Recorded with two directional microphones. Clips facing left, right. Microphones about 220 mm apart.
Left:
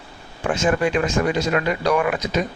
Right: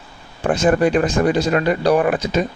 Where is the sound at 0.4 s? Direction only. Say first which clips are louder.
Right 4 dB; 35° right (ahead or behind).